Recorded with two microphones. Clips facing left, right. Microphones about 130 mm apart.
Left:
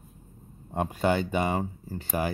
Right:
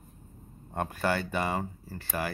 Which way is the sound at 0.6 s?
15° left (ahead or behind).